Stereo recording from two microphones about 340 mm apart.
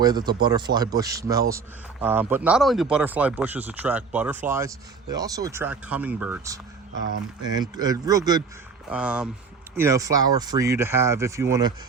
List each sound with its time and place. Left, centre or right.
0.0 s speech: centre
6.9 s speech: right
7.5 s speech: centre